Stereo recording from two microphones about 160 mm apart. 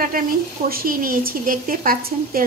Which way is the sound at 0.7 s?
65° right (ahead or behind).